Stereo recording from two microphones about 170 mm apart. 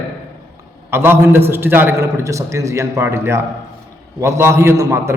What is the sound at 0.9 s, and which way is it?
A man's voice, 15° right (ahead or behind).